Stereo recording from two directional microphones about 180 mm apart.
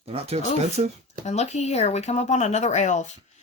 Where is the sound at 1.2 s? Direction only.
40° left (ahead or behind).